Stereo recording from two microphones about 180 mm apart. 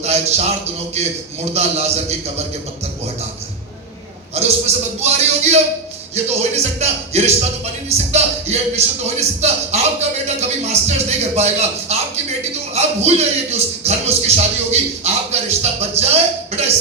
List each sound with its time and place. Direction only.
0.0 s a sound: 35° right (ahead or behind)
1.5 s speech: 35° right (ahead or behind)
4.4 s speech: 35° right (ahead or behind)
6.6 s speech: 35° right (ahead or behind)